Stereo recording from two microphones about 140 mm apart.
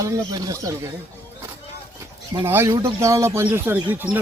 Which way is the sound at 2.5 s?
15° right (ahead or behind).